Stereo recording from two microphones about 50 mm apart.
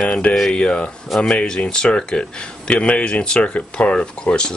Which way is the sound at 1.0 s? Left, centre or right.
Centre.